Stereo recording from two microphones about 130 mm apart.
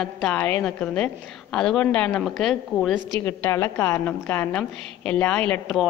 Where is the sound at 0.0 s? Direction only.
5° left (ahead or behind).